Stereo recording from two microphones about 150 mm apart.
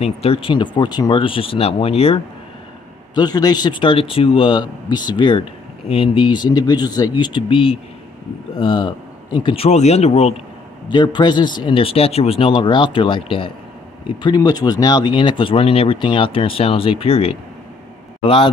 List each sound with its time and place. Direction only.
0.0 s speech: 40° left (ahead or behind)
3.2 s speech: 25° left (ahead or behind); by 10.3 s 45° left (ahead or behind)
10.9 s a man's voice: 30° left (ahead or behind)